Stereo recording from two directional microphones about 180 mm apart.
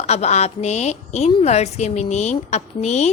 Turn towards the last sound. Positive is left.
turn(degrees=40)  # may be behind; listen again after turning